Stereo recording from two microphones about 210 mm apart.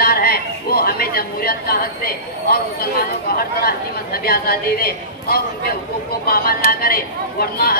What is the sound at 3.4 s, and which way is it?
Speech, 45° left (ahead or behind).